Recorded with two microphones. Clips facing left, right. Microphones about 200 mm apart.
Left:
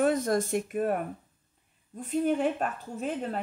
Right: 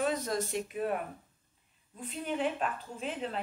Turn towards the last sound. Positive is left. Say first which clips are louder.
# left 4 dB
turn(degrees=45)  # may be behind; listen again after turning